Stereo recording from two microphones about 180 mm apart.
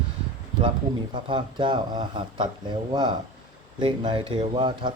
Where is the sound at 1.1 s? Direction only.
25° right (ahead or behind).